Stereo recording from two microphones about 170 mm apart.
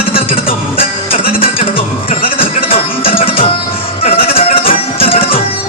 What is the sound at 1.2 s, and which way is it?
Music, 60° left (ahead or behind).